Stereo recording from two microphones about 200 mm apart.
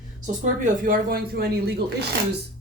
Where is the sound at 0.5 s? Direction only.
40° right (ahead or behind).